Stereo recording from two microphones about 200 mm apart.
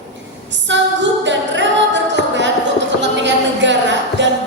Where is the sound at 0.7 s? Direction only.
65° right (ahead or behind).